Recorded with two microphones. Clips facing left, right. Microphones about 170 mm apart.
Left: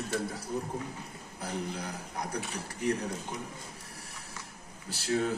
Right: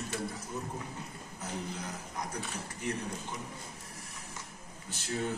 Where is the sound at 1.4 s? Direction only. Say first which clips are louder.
Left 3 dB; 35° left (ahead or behind).